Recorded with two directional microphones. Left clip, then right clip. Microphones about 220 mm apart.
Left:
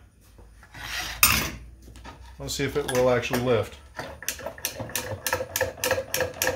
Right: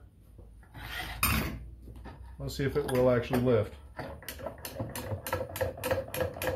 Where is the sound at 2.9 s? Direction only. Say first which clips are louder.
Left 4 dB; 20° left (ahead or behind).